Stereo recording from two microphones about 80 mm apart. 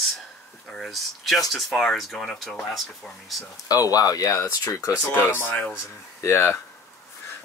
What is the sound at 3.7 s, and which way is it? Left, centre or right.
Speech, left.